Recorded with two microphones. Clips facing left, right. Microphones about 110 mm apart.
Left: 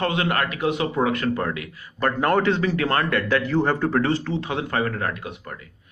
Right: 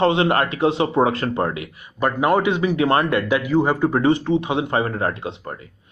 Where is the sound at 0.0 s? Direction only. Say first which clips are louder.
Right 6 dB; 25° right (ahead or behind).